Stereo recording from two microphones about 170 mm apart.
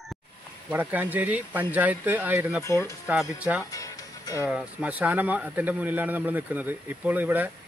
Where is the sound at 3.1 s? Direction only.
10° right (ahead or behind).